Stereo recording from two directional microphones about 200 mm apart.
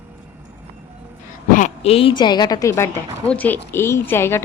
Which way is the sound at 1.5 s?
35° left (ahead or behind).